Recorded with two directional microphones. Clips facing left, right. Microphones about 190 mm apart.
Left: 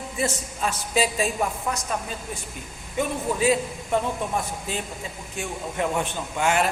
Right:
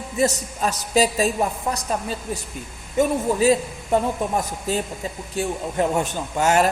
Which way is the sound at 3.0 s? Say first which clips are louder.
Right 5 dB; 40° right (ahead or behind).